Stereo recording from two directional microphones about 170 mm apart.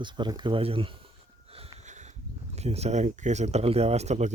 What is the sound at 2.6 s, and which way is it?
Speech, 40° right (ahead or behind).